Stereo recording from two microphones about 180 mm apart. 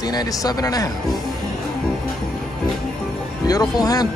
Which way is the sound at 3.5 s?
20° left (ahead or behind).